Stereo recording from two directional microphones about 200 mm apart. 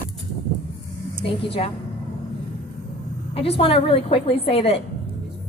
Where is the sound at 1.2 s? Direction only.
30° left (ahead or behind).